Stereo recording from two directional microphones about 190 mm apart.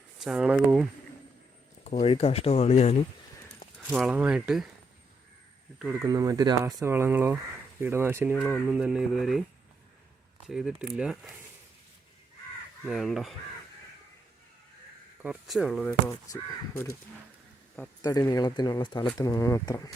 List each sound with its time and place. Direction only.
0.2 s speech: 5° right (ahead or behind)
1.8 s speech: 35° left (ahead or behind)
3.8 s speech: centre (ahead or behind)
6.1 s speech: 20° right (ahead or behind)
8.4 s speech: 5° left (ahead or behind)
10.4 s speech: centre (ahead or behind)
12.8 s speech: centre (ahead or behind)
15.2 s speech: 5° right (ahead or behind)
15.9 s speech: 15° left (ahead or behind)
18.0 s speech: 20° left (ahead or behind)